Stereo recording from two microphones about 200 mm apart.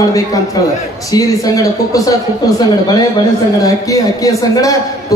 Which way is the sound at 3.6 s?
15° left (ahead or behind).